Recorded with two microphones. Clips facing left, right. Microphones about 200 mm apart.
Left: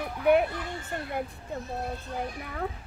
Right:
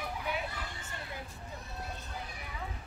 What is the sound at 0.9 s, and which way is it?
Speech, 60° left (ahead or behind).